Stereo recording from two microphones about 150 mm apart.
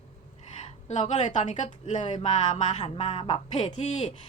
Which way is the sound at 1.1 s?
50° left (ahead or behind).